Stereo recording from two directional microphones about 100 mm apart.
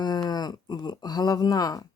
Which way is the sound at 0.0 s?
45° left (ahead or behind).